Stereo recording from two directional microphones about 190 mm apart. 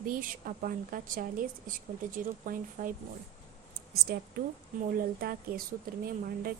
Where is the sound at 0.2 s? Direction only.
45° right (ahead or behind).